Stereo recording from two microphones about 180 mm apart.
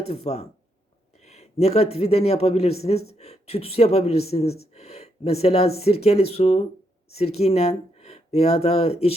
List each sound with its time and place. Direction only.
0.0 s speech: 35° left (ahead or behind)